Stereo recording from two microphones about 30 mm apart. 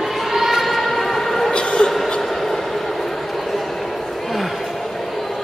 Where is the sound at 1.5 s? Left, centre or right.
Left.